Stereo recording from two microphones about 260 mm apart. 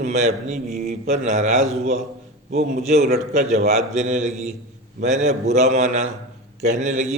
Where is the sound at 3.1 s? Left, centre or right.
Right.